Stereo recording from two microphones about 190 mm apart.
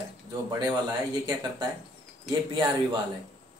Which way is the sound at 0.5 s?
20° right (ahead or behind).